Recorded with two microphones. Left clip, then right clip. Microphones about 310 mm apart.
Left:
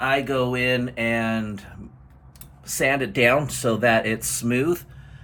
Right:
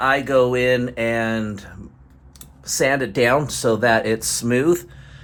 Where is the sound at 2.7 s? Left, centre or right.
Centre.